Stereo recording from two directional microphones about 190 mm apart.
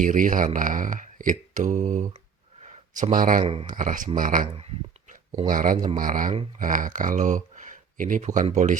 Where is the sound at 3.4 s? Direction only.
30° right (ahead or behind).